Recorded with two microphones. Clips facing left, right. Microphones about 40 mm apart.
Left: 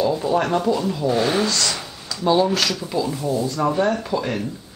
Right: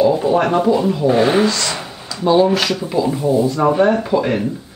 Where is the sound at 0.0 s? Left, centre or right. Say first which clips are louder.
Right 6 dB; centre.